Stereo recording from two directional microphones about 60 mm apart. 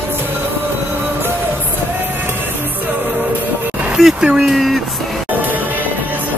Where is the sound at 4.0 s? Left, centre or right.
Centre.